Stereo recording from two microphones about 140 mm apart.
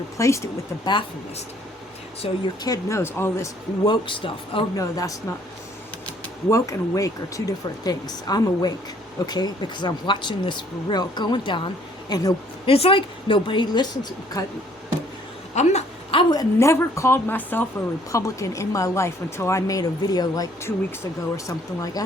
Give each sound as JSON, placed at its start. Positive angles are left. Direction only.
{"t": 0.2, "sound": "speech", "side_deg": 20}
{"t": 2.2, "sound": "speech", "side_deg": 45}
{"t": 2.6, "sound": "speech", "side_deg": 20}
{"t": 3.8, "sound": "speech", "side_deg": 35}
{"t": 4.8, "sound": "speech", "side_deg": 25}
{"t": 6.5, "sound": "speech", "side_deg": 20}
{"t": 12.6, "sound": "speech", "side_deg": 40}
{"t": 15.5, "sound": "speech", "side_deg": 55}
{"t": 16.1, "sound": "speech", "side_deg": 25}